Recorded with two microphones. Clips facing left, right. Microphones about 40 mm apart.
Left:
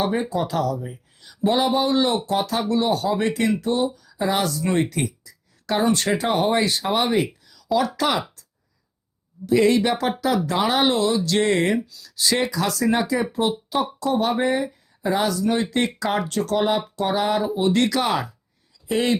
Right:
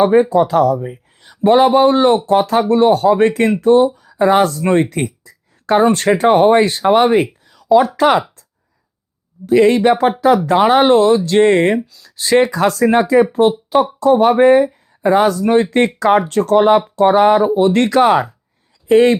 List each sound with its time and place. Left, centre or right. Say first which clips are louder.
0.2 s speech: right 12 dB; right
7.4 s a sound: right 10 dB; right
7.9 s speech: right 10 dB; right
9.5 s speech: right 7 dB; right